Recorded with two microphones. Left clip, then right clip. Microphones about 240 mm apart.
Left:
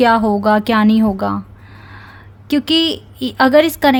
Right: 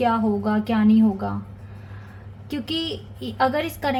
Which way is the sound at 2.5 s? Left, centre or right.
Left.